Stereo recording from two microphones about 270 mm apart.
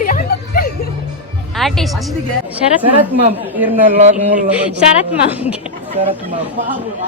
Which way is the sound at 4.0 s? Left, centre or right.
Right.